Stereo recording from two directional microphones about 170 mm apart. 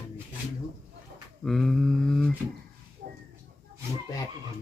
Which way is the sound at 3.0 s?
45° right (ahead or behind).